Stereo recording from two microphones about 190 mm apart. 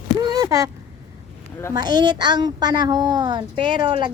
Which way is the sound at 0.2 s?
20° right (ahead or behind).